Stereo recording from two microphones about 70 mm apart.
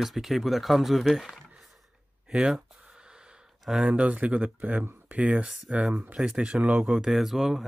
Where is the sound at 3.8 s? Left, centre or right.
Centre.